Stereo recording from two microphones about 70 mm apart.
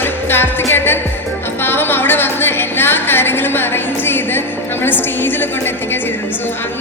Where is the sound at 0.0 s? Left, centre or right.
Left.